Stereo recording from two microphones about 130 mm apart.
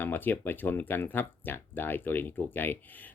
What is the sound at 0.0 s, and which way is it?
Speech, 15° left (ahead or behind).